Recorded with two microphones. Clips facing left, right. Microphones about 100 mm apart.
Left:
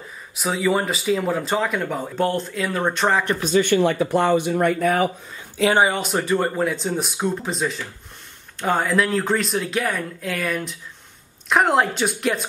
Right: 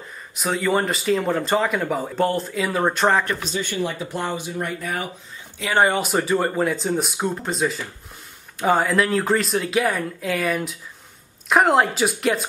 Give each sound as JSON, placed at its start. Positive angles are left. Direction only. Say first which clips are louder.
{"t": 0.4, "sound": "speech", "louder": "even", "side_deg": 0}
{"t": 3.4, "sound": "speech", "louder": "left 8 dB", "side_deg": 60}
{"t": 5.8, "sound": "speech", "louder": "right 1 dB", "side_deg": 0}